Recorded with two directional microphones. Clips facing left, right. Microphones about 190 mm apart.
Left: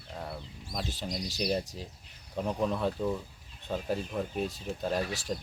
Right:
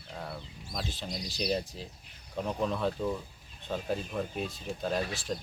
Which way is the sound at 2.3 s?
10° left (ahead or behind).